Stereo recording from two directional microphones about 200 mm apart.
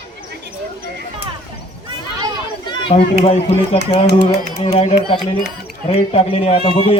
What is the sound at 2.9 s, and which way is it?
A man's voice, 30° left (ahead or behind).